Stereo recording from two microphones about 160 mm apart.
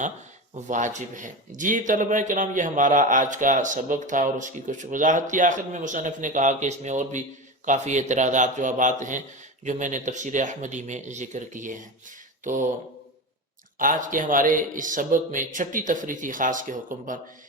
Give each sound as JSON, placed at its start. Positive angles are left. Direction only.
{"t": 0.5, "sound": "speech", "side_deg": -50}
{"t": 13.7, "sound": "speech", "side_deg": -55}